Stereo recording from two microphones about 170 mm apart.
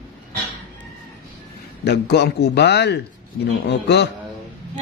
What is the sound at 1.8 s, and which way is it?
Speech, 80° left.